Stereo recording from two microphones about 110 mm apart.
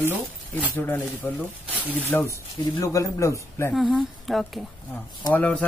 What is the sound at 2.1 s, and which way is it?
Speech, 10° left (ahead or behind).